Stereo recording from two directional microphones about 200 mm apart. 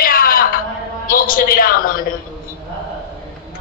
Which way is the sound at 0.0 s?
45° left (ahead or behind).